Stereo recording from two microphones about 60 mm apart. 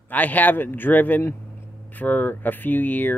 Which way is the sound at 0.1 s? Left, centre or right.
Left.